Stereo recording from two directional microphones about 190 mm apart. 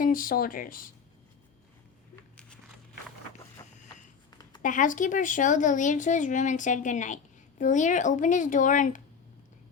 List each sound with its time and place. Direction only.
0.0 s speech: 50° left (ahead or behind)
4.3 s a sound: 20° left (ahead or behind)
4.6 s speech: 45° left (ahead or behind)